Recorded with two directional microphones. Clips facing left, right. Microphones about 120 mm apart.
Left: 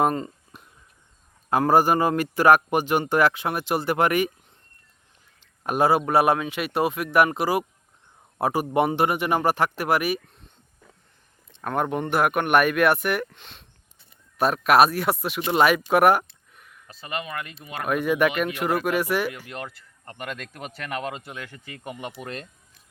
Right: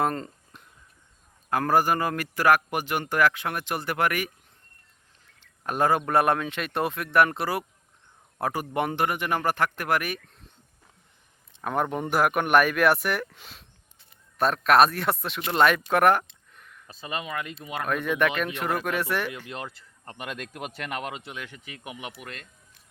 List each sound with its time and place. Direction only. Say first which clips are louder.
0.0 s a sound: left 4 dB; 15° left (ahead or behind)
1.5 s a man's voice: left 4 dB; 20° left (ahead or behind)
5.4 s a man's voice: left 3 dB; 15° left (ahead or behind)
11.6 s speech: left 2 dB; centre (ahead or behind)
15.4 s a sound: left 2 dB; 5° left (ahead or behind)
16.8 s speech: left 1 dB; 20° right (ahead or behind)
17.8 s a man's voice: left 4 dB; 10° left (ahead or behind); by 22.0 s 10° right (ahead or behind)